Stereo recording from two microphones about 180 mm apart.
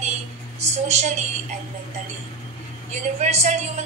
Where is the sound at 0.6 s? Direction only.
40° right (ahead or behind).